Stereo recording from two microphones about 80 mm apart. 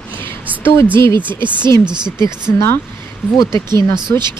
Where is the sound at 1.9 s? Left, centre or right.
Right.